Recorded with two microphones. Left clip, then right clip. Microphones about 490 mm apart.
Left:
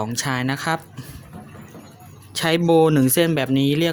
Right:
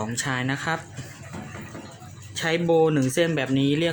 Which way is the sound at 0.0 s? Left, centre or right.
Left.